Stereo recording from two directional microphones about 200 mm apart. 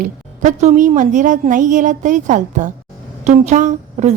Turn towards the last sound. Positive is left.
turn(degrees=-35)  # may be behind; listen again after turning